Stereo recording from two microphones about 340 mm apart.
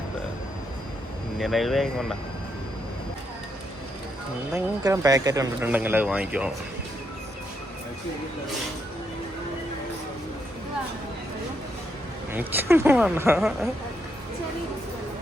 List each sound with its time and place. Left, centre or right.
1.4 s speech: centre
4.5 s speech: centre
12.3 s a woman's voice: centre